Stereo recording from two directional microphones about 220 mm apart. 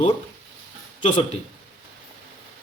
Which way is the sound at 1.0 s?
30° left (ahead or behind).